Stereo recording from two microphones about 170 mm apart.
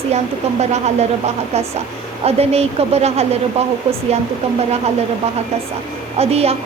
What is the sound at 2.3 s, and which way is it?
Speech, 35° right (ahead or behind).